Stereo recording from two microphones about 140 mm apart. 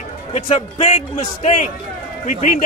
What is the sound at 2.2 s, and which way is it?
Speech, 70° left (ahead or behind).